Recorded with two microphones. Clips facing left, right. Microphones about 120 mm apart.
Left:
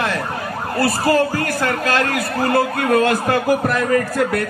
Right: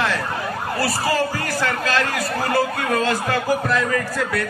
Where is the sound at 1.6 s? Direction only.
50° left (ahead or behind).